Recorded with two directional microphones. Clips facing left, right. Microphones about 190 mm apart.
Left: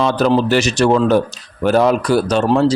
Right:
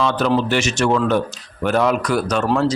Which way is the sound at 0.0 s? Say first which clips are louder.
Left 4 dB; 35° left (ahead or behind).